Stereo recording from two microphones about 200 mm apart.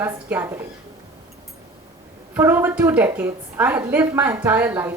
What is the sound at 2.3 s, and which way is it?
A woman's voice, 10° right (ahead or behind).